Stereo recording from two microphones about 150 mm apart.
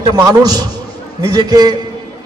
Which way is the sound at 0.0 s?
25° right (ahead or behind).